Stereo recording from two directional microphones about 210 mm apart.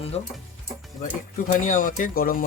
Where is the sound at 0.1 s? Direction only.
30° left (ahead or behind).